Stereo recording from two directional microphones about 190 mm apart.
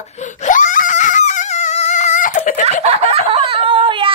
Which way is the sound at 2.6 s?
35° right (ahead or behind).